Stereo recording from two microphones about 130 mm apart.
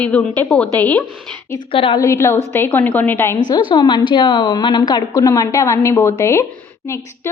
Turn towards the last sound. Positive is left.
turn(degrees=20)  # may be behind; listen again after turning